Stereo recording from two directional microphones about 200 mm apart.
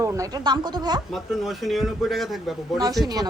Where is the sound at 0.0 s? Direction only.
15° right (ahead or behind).